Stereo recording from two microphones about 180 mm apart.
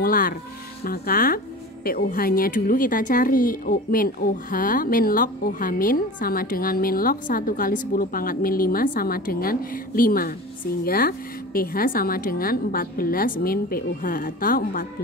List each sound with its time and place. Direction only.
0.0 s speech: 50° left (ahead or behind)